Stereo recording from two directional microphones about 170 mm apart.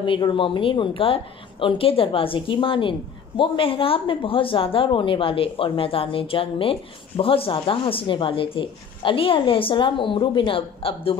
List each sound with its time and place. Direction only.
0.0 s a woman's voice: 30° left (ahead or behind)